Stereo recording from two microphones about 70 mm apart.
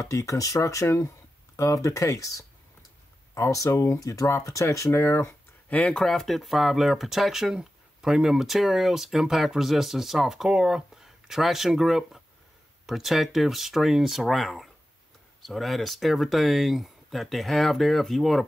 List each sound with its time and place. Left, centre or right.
0.0 s speech: left
5.7 s speech: left
5.9 s speech: centre